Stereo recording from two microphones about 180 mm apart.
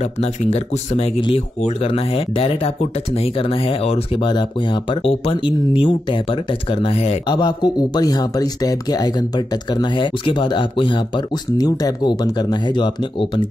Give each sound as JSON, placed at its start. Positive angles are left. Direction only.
{"t": 0.2, "sound": "speech", "side_deg": 35}